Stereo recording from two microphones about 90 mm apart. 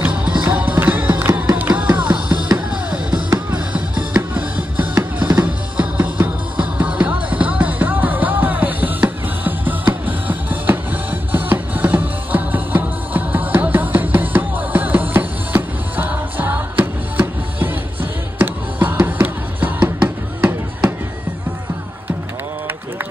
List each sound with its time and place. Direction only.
0.0 s music: 15° right (ahead or behind)